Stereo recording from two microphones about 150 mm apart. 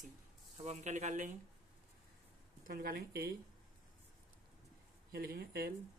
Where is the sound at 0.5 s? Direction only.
50° right (ahead or behind).